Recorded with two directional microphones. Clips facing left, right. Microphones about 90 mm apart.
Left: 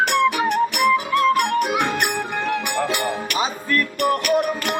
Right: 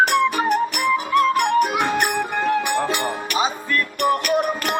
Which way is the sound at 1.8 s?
35° right (ahead or behind).